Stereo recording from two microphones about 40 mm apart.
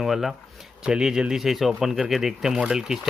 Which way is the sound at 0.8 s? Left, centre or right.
Centre.